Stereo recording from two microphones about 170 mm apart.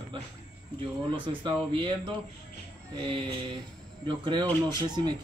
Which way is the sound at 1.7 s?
30° right (ahead or behind).